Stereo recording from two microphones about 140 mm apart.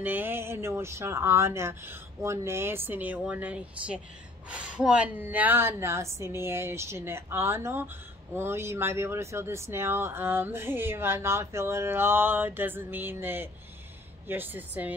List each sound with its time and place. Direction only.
0.0 s speech: 15° right (ahead or behind)